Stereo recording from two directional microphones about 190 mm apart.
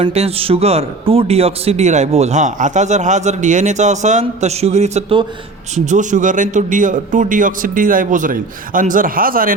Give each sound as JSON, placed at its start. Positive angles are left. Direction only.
{"t": 0.0, "sound": "a man's voice", "side_deg": -30}